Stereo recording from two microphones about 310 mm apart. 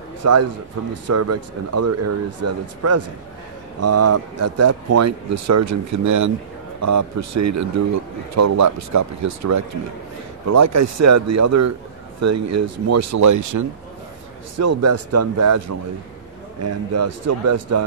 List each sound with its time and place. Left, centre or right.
0.2 s a man's voice: right
14.6 s speech: right
16.6 s speech: right